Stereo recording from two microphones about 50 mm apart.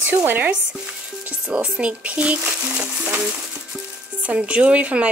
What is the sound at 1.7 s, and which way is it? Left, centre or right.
Speech, right.